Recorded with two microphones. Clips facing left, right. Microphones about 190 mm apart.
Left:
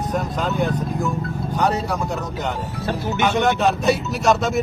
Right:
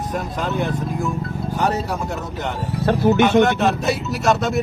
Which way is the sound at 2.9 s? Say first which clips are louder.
Right 9 dB; 60° right (ahead or behind).